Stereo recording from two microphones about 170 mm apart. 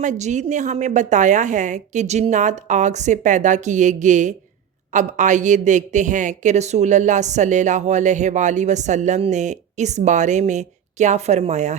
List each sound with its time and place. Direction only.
0.0 s a woman's voice: 45° right (ahead or behind)